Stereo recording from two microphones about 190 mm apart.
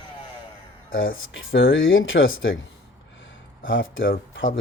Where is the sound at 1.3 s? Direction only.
90° left.